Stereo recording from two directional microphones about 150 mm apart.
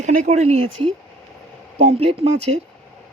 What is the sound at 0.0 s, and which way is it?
Speech, 50° right (ahead or behind).